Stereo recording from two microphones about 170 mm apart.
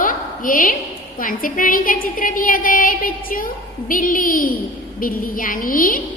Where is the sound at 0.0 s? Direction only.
55° left (ahead or behind).